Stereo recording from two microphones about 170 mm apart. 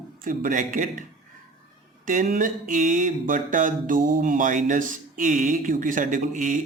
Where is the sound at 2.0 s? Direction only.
50° right (ahead or behind).